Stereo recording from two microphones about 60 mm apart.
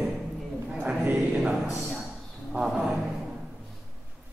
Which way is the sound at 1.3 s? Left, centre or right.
Centre.